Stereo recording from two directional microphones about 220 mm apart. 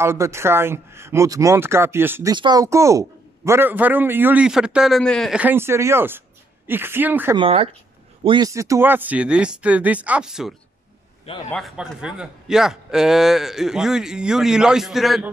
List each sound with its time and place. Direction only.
0.0 s a man's voice: 10° right (ahead or behind)
7.3 s a man's voice: 25° right (ahead or behind); by 10.5 s 5° right (ahead or behind)
11.5 s a man's voice: centre (ahead or behind)